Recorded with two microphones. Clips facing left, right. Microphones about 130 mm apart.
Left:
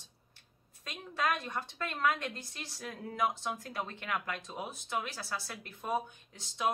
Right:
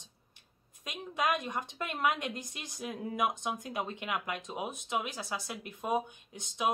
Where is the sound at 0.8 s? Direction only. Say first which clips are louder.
Right 2 dB; 15° right (ahead or behind).